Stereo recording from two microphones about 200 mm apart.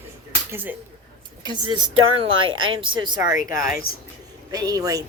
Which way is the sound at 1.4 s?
20° right (ahead or behind).